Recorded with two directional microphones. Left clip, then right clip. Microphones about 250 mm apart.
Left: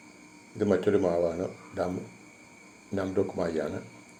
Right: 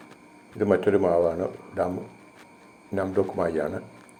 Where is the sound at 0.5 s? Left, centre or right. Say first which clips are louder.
Right 4 dB; centre.